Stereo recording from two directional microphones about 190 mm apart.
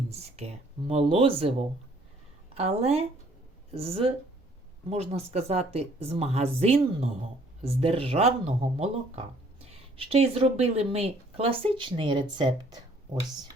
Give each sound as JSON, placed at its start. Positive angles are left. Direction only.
{"t": 0.1, "sound": "speech", "side_deg": -35}